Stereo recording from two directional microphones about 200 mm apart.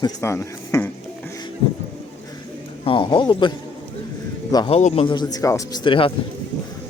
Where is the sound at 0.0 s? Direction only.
15° left (ahead or behind).